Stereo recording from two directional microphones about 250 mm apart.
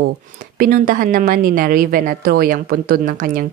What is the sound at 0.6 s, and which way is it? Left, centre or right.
Speech, right.